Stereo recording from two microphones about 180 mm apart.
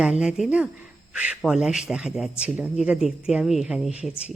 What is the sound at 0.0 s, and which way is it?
Speech, 5° right (ahead or behind).